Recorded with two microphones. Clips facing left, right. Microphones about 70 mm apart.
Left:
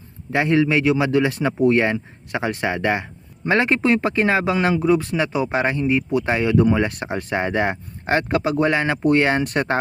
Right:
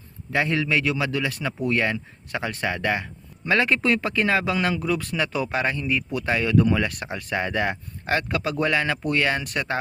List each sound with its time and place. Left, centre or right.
0.3 s speech: centre; by 9.7 s left